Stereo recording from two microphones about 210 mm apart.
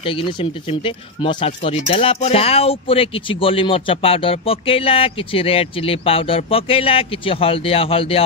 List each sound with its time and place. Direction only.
0.0 s speech: 25° left (ahead or behind)